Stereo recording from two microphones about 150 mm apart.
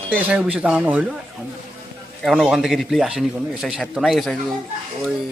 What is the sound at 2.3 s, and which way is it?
Speech, centre (ahead or behind).